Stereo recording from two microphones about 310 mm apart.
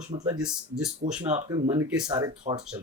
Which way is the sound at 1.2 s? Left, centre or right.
Centre.